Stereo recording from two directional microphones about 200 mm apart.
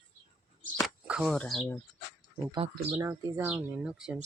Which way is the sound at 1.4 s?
5° left (ahead or behind).